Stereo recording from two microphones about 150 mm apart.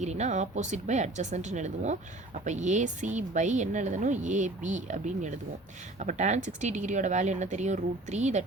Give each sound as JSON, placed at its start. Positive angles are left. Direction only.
{"t": 0.0, "sound": "speech", "side_deg": -50}